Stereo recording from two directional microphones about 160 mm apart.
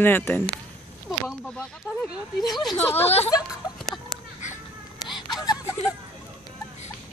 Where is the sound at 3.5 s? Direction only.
Centre (ahead or behind).